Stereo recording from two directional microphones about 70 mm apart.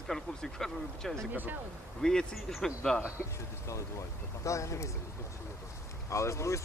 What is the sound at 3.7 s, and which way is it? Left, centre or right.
Speech, left.